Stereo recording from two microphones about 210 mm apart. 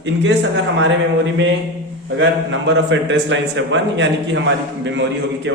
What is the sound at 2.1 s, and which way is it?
A man's voice, 60° right (ahead or behind).